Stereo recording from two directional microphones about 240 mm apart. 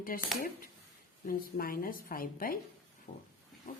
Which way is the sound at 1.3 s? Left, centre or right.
Left.